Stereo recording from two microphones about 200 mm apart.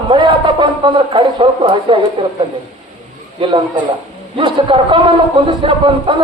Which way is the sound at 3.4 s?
25° right (ahead or behind).